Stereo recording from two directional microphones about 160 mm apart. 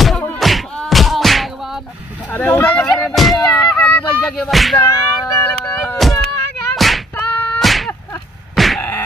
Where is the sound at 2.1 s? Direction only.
10° left (ahead or behind).